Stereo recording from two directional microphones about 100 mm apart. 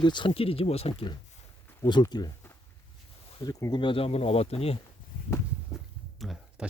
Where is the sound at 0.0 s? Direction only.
50° left (ahead or behind); by 1.0 s 85° left.